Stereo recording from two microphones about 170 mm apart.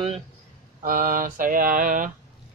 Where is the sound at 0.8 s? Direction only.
55° right (ahead or behind).